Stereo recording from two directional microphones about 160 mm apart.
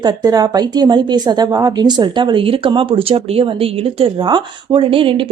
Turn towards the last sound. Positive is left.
turn(degrees=-35)  # may be behind; listen again after turning